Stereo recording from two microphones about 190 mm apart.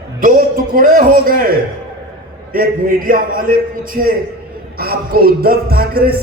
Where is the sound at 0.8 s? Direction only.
45° right (ahead or behind).